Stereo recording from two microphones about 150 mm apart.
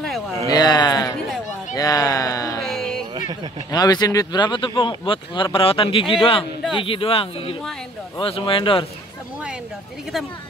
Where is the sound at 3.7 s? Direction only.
25° left (ahead or behind).